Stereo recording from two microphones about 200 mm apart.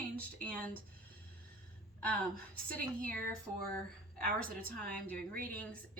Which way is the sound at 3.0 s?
5° left (ahead or behind).